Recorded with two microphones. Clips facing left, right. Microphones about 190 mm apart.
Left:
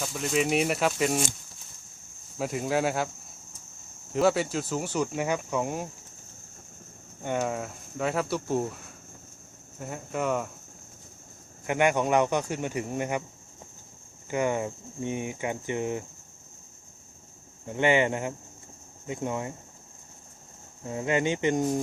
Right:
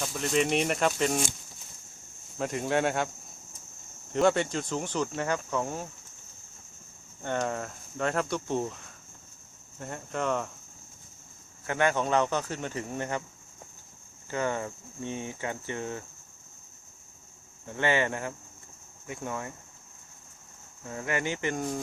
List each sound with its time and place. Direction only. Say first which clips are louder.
0.0 s speech: even; centre (ahead or behind)
2.4 s speech: left 1 dB; 5° left (ahead or behind)
4.1 s speech: left 1 dB; 5° left (ahead or behind)
7.2 s speech: left 2 dB; 10° left (ahead or behind)
9.8 s speech: left 2 dB; 5° left (ahead or behind)
11.6 s speech: left 3 dB; 15° left (ahead or behind)
14.3 s speech: left 3 dB; 15° left (ahead or behind)
17.7 s speech: left 4 dB; 15° left (ahead or behind)
20.8 s speech: left 5 dB; 20° left (ahead or behind)